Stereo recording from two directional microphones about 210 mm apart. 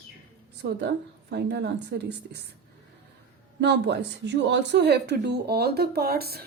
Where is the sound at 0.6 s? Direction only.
55° right (ahead or behind).